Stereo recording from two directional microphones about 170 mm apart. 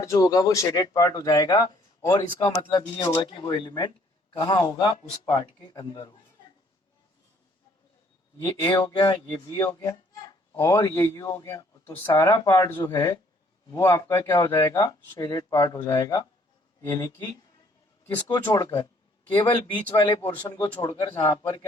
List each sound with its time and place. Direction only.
0.0 s speech: 20° left (ahead or behind)
8.4 s speech: 25° left (ahead or behind)
18.3 s speech: 15° left (ahead or behind)
19.3 s speech: 30° left (ahead or behind)